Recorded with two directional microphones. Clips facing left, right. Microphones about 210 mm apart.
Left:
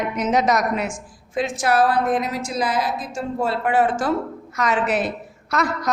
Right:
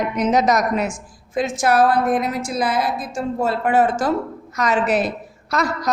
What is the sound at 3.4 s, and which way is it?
A woman's voice, 40° right (ahead or behind).